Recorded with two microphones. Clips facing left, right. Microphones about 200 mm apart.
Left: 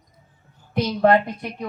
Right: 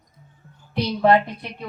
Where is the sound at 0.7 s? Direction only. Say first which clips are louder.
Even; 50° left (ahead or behind).